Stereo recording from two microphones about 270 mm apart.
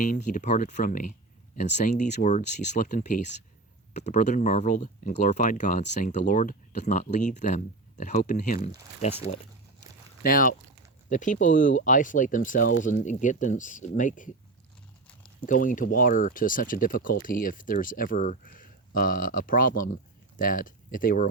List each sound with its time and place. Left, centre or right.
0.0 s speech: left
10.2 s speech: left
15.4 s speech: left